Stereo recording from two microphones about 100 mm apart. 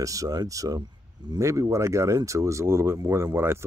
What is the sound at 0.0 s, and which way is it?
Speech, 35° right (ahead or behind).